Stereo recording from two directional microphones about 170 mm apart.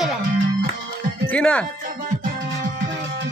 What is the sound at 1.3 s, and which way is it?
Speech, 5° left (ahead or behind).